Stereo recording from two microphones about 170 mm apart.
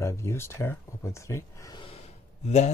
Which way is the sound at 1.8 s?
40° left (ahead or behind).